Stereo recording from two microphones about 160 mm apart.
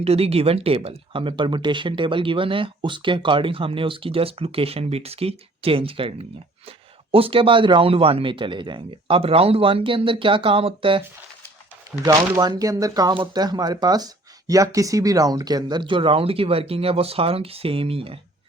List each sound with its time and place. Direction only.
0.0 s speech: 40° right (ahead or behind)
11.9 s speech: 25° right (ahead or behind)